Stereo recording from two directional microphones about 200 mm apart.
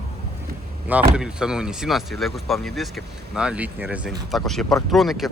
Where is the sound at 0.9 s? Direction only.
5° right (ahead or behind).